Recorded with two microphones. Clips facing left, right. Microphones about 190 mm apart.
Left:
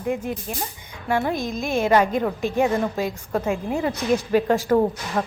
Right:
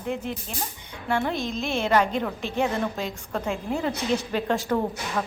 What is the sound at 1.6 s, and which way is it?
Speech, 40° left (ahead or behind).